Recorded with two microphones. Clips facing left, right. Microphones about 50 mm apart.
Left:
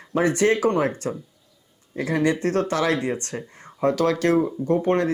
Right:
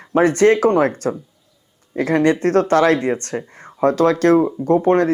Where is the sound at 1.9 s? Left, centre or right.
Right.